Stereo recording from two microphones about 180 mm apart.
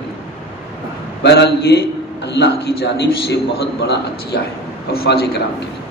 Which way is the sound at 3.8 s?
65° left (ahead or behind).